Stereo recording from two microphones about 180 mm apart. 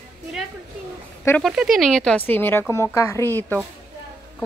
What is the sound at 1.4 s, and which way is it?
Speech, centre (ahead or behind).